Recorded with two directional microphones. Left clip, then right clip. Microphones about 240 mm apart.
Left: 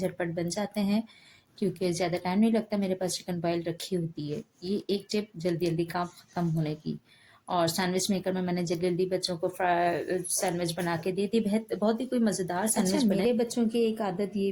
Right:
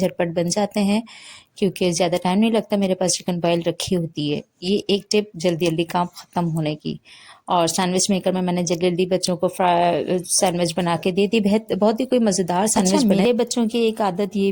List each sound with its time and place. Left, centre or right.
0.0 s speech: right